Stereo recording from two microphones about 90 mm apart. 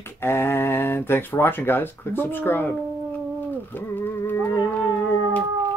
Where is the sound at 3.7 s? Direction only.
25° left (ahead or behind).